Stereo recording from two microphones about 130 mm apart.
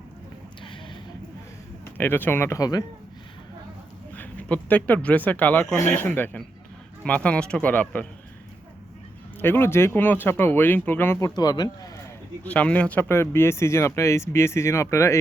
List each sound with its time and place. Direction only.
1.8 s speech: 15° left (ahead or behind)
4.1 s speech: 10° left (ahead or behind)
9.4 s speech: 15° left (ahead or behind)
11.3 s speech: 30° left (ahead or behind)
12.4 s speech: 10° left (ahead or behind)